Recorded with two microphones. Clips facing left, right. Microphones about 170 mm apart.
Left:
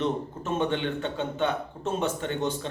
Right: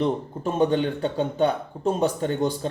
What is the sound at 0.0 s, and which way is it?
Speech, 35° right (ahead or behind).